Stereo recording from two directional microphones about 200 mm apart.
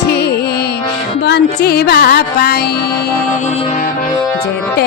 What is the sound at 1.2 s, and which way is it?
Music, 55° left (ahead or behind).